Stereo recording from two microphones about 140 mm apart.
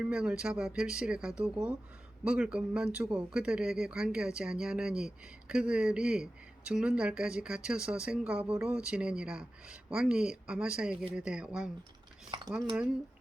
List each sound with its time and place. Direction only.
0.0 s speech: 5° right (ahead or behind)
12.3 s dishes: 30° right (ahead or behind)